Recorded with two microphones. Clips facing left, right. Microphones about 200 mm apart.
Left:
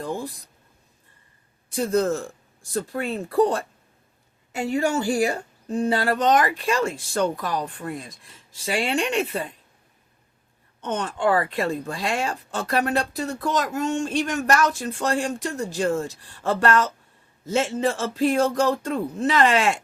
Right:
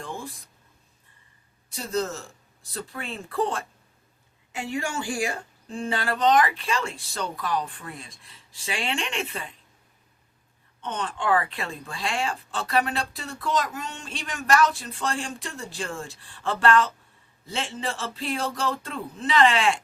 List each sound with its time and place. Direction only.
0.0 s a sound: 40° left (ahead or behind)
1.7 s speech: 55° left (ahead or behind)
10.8 s speech: 45° left (ahead or behind)